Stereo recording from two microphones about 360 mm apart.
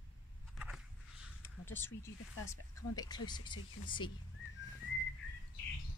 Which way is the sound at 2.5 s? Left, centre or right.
Centre.